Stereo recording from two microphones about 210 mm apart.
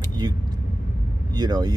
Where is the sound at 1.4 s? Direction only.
20° right (ahead or behind).